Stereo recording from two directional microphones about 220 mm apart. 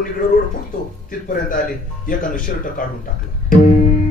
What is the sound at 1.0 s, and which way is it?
A man's voice, 40° left (ahead or behind).